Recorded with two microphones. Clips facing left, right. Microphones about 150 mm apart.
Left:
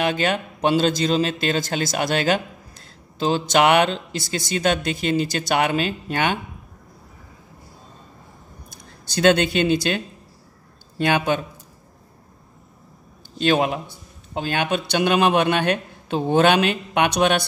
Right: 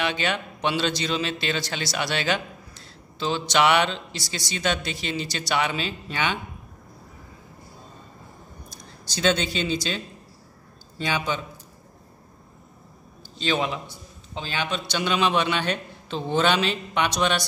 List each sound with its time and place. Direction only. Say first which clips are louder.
0.0 s speech: left 5 dB; 50° left (ahead or behind)
8.6 s speech: even; 60° left (ahead or behind)
13.4 s speech: left 6 dB; 55° left (ahead or behind)